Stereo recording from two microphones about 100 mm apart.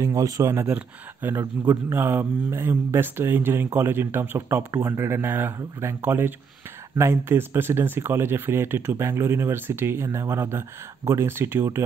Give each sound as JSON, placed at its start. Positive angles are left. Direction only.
{"t": 0.0, "sound": "speech", "side_deg": -35}